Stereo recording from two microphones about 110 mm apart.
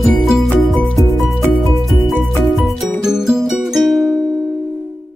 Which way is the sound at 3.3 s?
5° right (ahead or behind).